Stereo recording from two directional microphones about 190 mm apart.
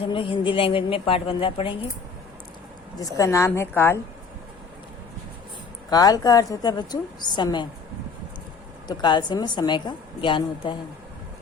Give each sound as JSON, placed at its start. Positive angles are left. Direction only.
{"t": 0.0, "sound": "a woman's voice", "side_deg": 30}
{"t": 3.0, "sound": "a woman's voice", "side_deg": 15}
{"t": 5.9, "sound": "a woman's voice", "side_deg": 20}
{"t": 8.9, "sound": "a woman's voice", "side_deg": 25}